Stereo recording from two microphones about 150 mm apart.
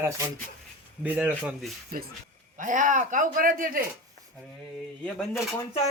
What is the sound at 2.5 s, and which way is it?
A man's voice, 60° right (ahead or behind).